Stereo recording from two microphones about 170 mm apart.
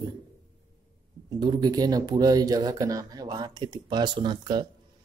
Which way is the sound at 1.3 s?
25° right (ahead or behind).